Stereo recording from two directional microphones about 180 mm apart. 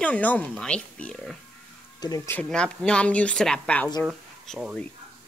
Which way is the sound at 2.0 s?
20° left (ahead or behind).